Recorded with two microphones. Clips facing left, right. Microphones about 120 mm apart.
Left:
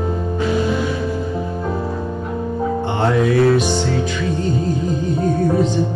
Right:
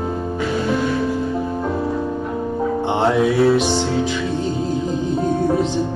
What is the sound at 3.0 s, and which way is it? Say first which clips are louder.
Music: left 1 dB; 5° right (ahead or behind).